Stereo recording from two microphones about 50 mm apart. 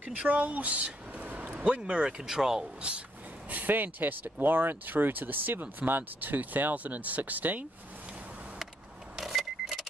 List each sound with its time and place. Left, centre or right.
0.0 s speech: right; by 2.7 s centre
3.4 s speech: right
9.1 s vehicle: centre